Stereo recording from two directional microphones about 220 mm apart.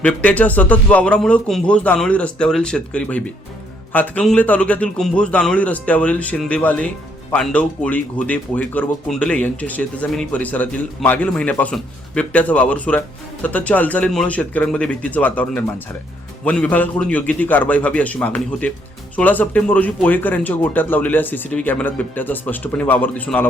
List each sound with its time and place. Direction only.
0.0 s a man's voice: 5° left (ahead or behind)